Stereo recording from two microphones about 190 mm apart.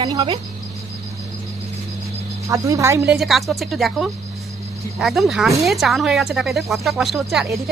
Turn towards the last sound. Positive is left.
turn(degrees=0)  # may be behind; listen again after turning